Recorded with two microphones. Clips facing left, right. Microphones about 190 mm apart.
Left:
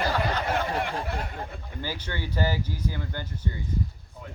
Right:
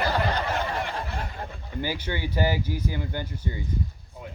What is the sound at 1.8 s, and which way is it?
Speech, 10° right (ahead or behind).